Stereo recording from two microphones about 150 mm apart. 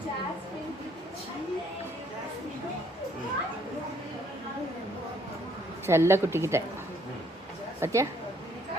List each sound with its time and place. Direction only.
5.8 s a woman's voice: 15° right (ahead or behind)
7.8 s a woman's voice: 20° right (ahead or behind)